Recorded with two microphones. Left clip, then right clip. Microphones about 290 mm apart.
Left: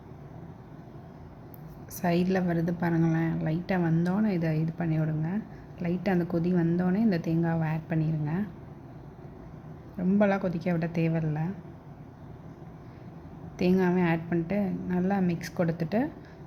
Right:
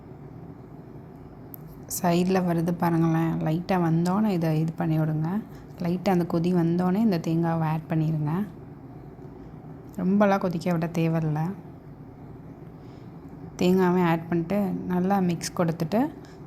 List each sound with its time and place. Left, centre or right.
1.9 s a woman's voice: centre
10.0 s a woman's voice: centre
13.6 s a woman's voice: centre